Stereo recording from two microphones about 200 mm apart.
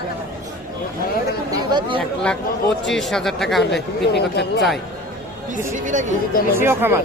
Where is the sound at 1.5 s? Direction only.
20° right (ahead or behind).